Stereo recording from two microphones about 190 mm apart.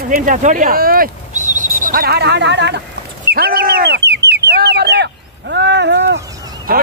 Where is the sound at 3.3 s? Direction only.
50° right (ahead or behind).